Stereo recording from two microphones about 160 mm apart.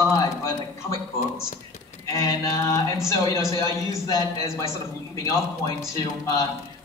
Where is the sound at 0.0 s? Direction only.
20° left (ahead or behind).